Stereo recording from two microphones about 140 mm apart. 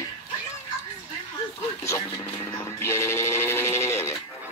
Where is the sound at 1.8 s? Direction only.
20° left (ahead or behind).